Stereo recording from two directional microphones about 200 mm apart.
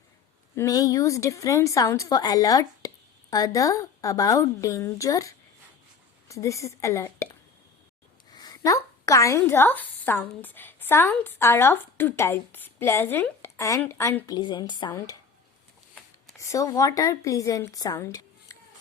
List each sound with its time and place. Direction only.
0.5 s a woman's voice: 15° left (ahead or behind)
16.4 s a woman's voice: 15° left (ahead or behind)